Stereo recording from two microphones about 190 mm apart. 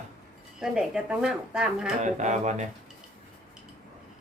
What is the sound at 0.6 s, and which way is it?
Speech, 5° right (ahead or behind).